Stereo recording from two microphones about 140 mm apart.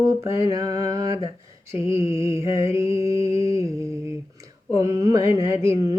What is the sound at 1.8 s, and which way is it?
Mantra, 20° right (ahead or behind).